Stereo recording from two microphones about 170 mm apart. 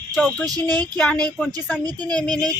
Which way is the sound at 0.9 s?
10° left (ahead or behind).